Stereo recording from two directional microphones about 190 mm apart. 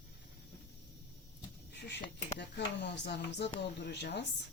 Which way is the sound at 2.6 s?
65° left (ahead or behind).